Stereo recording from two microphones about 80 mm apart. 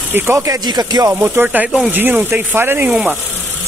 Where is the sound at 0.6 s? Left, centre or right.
Right.